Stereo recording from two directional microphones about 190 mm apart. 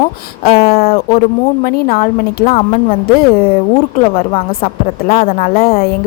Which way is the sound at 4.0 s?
30° left (ahead or behind).